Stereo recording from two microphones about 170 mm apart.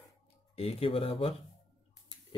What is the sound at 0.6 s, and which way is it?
Speech, 35° left (ahead or behind).